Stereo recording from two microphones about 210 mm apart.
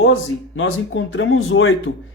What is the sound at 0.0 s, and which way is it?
Speech, 65° left (ahead or behind).